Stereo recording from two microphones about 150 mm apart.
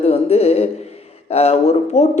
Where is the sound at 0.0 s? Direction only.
45° left (ahead or behind).